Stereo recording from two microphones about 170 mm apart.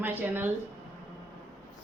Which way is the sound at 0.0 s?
10° right (ahead or behind).